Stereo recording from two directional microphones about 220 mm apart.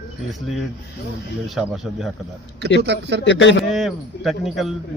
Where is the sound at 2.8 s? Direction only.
50° right (ahead or behind).